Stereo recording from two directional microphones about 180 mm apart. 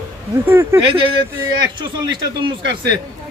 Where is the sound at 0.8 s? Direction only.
30° right (ahead or behind).